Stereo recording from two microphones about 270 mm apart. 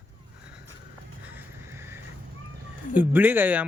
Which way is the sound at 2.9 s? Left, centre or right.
Centre.